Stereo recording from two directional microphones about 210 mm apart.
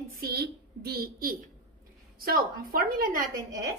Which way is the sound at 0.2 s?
50° right (ahead or behind).